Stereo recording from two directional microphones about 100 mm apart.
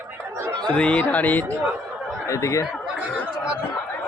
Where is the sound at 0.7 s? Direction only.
10° left (ahead or behind).